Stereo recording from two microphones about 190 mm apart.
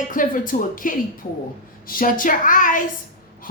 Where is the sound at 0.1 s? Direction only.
45° left (ahead or behind).